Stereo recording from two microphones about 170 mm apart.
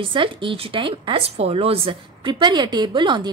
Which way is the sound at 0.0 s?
30° right (ahead or behind).